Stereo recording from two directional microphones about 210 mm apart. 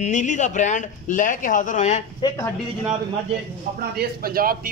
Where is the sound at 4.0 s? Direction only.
45° right (ahead or behind).